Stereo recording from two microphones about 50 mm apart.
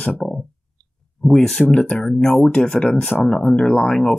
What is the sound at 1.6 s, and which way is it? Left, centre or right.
Speech, left.